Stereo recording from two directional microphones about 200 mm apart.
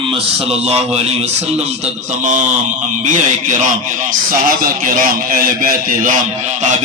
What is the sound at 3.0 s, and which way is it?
Speech, 40° right (ahead or behind).